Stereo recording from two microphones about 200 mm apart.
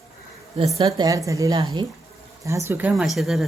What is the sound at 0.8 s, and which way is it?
A woman's voice, 20° right (ahead or behind).